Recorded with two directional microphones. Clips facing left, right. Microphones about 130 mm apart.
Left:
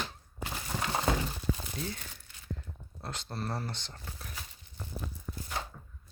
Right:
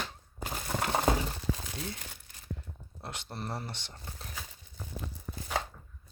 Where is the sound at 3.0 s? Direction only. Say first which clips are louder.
Left 2 dB; 20° right (ahead or behind).